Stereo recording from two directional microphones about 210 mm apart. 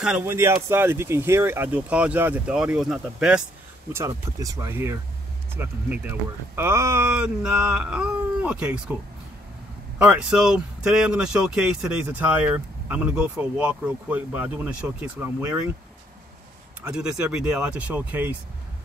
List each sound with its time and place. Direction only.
0.0 s speech: 5° right (ahead or behind)
4.4 s speech: 15° right (ahead or behind)
9.9 s speech: 5° right (ahead or behind)
16.8 s speech: 5° right (ahead or behind)